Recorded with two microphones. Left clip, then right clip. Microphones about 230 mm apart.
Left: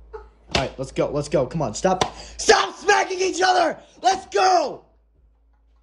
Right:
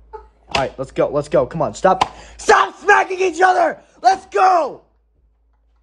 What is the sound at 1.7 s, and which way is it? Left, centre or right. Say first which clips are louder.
A man's voice: right 6 dB; centre.